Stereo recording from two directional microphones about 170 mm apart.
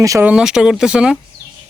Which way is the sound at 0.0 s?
20° right (ahead or behind).